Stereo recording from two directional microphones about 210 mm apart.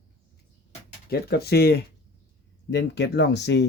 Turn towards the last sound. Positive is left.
turn(degrees=55)  # may be behind; listen again after turning